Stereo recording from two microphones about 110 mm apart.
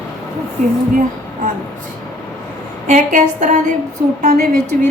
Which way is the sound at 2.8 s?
90° right.